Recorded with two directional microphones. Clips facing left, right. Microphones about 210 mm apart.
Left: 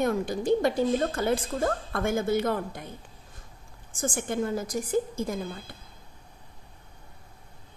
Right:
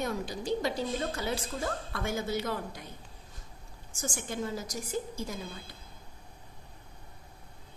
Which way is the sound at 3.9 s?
55° left (ahead or behind).